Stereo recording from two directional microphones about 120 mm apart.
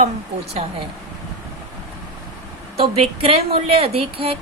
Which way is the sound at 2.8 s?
50° right (ahead or behind).